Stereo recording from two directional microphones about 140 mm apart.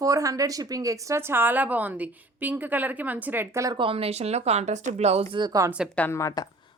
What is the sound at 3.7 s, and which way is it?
Speech, 40° right (ahead or behind).